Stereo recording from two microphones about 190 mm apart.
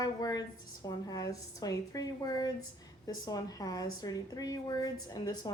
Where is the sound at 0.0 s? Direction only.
20° left (ahead or behind).